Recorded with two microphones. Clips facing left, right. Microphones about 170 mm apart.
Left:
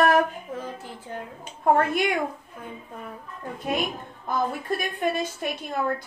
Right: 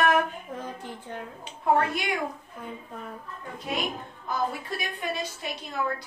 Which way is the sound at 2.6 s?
5° left (ahead or behind).